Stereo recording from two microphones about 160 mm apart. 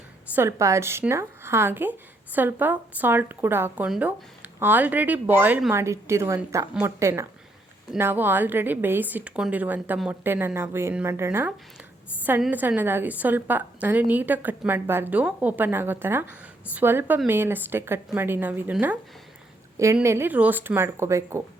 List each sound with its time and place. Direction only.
0.3 s a woman's voice: 20° right (ahead or behind)